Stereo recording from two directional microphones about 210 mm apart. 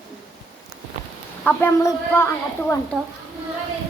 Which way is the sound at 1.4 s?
10° left (ahead or behind).